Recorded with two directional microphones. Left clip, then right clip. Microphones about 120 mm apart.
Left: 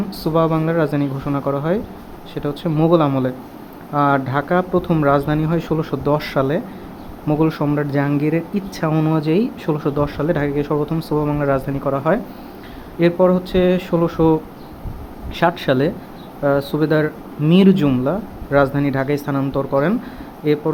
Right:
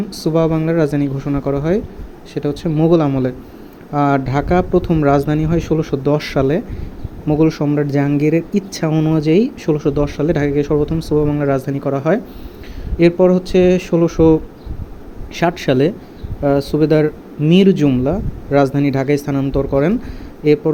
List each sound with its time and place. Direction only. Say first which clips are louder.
0.2 s speech: right 1 dB; 35° right (ahead or behind)
7.8 s speech: right 3 dB; 40° right (ahead or behind)
8.9 s speech: right 3 dB; 30° right (ahead or behind)
15.4 s speech: right 2 dB; 40° right (ahead or behind)